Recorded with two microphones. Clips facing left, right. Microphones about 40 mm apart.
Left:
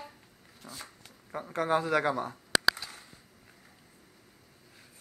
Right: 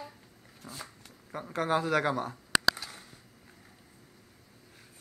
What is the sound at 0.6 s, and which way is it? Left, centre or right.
Speech, centre.